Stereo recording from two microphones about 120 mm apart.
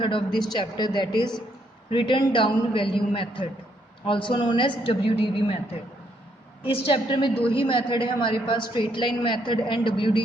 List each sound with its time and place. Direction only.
0.0 s a woman's voice: 45° left (ahead or behind)
6.6 s a woman's voice: 50° left (ahead or behind)